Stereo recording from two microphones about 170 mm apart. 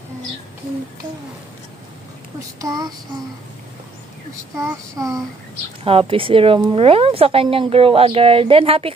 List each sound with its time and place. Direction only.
2.6 s child singing: 20° right (ahead or behind)
4.6 s child singing: 20° right (ahead or behind)
5.9 s a woman's voice: 35° right (ahead or behind)